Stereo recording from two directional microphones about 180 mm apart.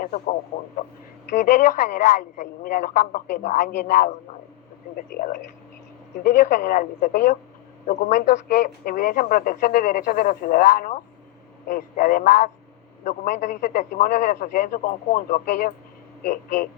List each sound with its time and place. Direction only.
0.0 s a man's voice: 50° left (ahead or behind)